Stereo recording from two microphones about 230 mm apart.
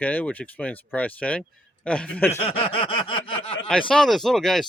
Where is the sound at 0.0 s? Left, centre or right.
Centre.